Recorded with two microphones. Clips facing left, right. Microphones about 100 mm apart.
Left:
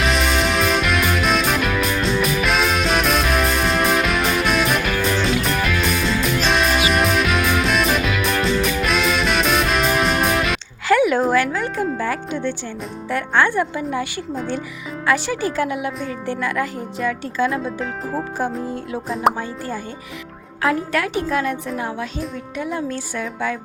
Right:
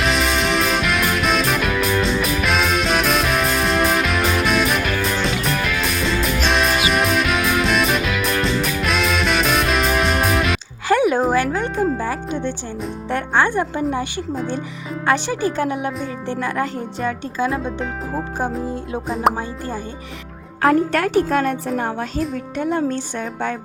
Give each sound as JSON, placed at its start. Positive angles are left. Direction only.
{"t": 0.0, "sound": "music", "side_deg": 0}
{"t": 10.8, "sound": "a sound", "side_deg": -25}
{"t": 11.9, "sound": "music", "side_deg": -20}
{"t": 13.1, "sound": "speech", "side_deg": -25}
{"t": 17.4, "sound": "speech", "side_deg": -20}
{"t": 17.7, "sound": "speech", "side_deg": 0}
{"t": 19.4, "sound": "speech", "side_deg": -20}
{"t": 20.6, "sound": "speech", "side_deg": -40}